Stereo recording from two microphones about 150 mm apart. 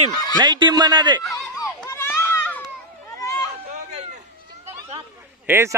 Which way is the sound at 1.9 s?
15° left (ahead or behind).